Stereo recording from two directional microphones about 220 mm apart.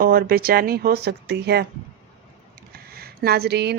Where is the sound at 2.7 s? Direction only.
45° right (ahead or behind).